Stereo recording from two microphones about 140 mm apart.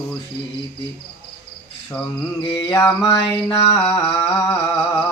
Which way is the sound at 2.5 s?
20° left (ahead or behind).